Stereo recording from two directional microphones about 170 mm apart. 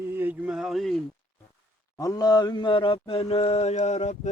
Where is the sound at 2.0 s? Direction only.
20° left (ahead or behind).